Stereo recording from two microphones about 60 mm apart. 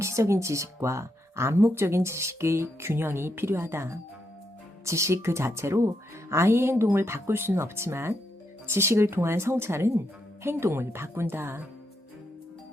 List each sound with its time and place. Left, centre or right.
0.0 s speech: right
4.9 s speech: right